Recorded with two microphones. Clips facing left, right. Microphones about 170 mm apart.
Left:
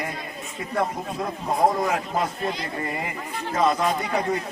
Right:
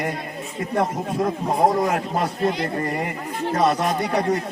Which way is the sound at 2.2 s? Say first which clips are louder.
Right 5 dB; 65° right (ahead or behind).